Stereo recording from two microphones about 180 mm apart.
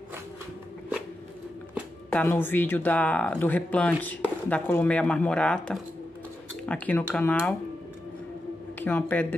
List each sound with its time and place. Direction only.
2.0 s speech: 10° left (ahead or behind)
8.7 s speech: 10° left (ahead or behind)